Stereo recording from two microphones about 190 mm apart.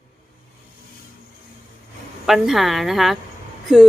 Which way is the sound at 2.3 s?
Centre (ahead or behind).